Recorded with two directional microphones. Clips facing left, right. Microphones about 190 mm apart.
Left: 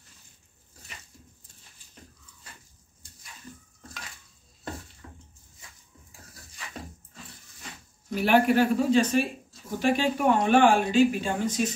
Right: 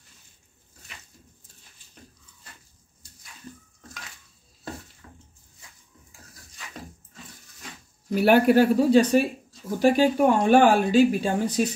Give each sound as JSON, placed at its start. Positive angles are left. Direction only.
{"t": 8.3, "sound": "speech", "side_deg": -40}